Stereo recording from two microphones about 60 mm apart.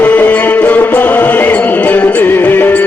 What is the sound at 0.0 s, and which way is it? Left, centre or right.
Music, left.